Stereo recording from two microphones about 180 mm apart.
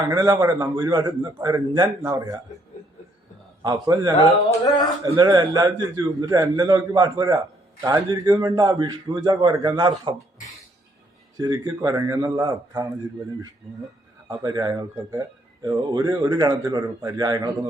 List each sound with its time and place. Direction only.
0.0 s a man's voice: 20° right (ahead or behind)
3.6 s a man's voice: 20° right (ahead or behind)
4.2 s a sound: 20° left (ahead or behind)
5.0 s a man's voice: 20° right (ahead or behind)
11.3 s a man's voice: 20° right (ahead or behind)
14.3 s a man's voice: 20° right (ahead or behind)